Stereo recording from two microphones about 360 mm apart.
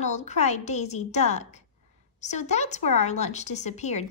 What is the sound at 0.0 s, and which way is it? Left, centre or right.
A woman's voice, centre.